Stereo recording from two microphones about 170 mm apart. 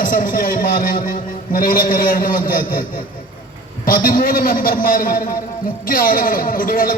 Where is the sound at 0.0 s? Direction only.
55° left (ahead or behind).